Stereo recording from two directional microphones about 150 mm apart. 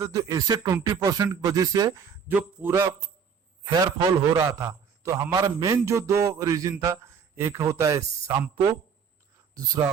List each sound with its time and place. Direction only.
0.0 s a man's voice: 20° right (ahead or behind)
3.6 s a man's voice: 30° right (ahead or behind)